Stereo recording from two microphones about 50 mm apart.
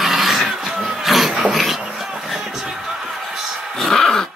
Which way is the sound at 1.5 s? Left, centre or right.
Centre.